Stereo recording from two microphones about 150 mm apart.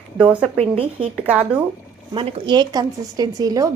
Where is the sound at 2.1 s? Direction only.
35° right (ahead or behind).